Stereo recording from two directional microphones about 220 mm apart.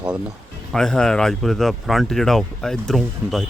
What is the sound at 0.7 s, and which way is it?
Speech, centre (ahead or behind).